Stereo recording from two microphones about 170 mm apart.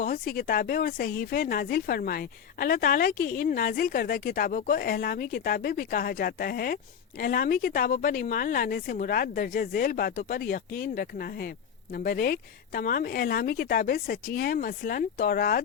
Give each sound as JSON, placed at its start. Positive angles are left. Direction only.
{"t": 0.0, "sound": "speech", "side_deg": 55}